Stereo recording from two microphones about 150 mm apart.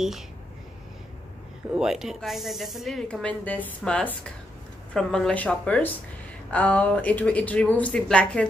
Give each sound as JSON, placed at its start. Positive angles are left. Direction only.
{"t": 1.7, "sound": "speech", "side_deg": -5}